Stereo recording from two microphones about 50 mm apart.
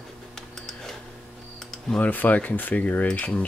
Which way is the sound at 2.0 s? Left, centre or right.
Left.